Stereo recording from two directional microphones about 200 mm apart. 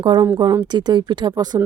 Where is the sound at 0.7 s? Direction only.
20° right (ahead or behind).